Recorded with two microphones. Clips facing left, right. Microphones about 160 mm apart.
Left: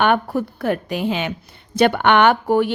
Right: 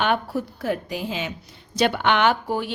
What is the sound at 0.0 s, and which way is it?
Speech, 60° left (ahead or behind).